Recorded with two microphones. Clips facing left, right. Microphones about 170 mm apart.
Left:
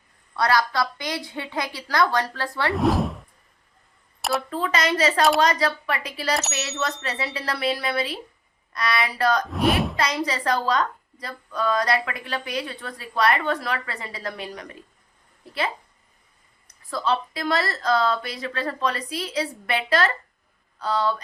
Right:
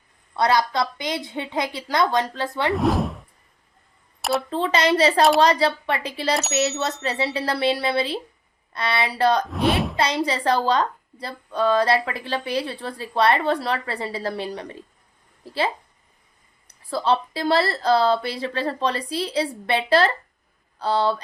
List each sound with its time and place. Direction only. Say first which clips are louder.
0.3 s speech: right 2 dB; 25° right (ahead or behind)
2.7 s speech: left 2 dB; centre (ahead or behind)
4.4 s speech: right 3 dB; 25° right (ahead or behind)
9.5 s speech: even; centre (ahead or behind)
10.0 s speech: right 3 dB; 30° right (ahead or behind)